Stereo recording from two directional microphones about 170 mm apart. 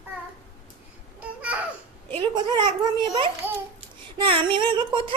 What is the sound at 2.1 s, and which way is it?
A woman's voice, 30° right (ahead or behind).